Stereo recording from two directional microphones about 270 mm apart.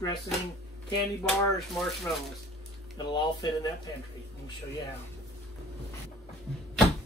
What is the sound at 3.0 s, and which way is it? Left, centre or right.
Speech, centre.